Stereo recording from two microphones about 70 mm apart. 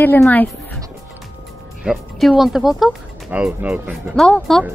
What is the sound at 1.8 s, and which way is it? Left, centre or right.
Speech, centre.